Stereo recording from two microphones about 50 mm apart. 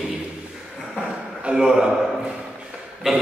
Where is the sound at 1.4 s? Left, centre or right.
Centre.